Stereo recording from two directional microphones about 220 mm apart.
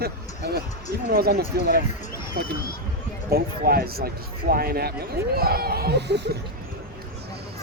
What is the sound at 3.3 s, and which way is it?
Speech, 45° right (ahead or behind).